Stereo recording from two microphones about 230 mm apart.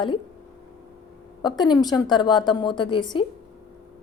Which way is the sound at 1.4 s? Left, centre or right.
Centre.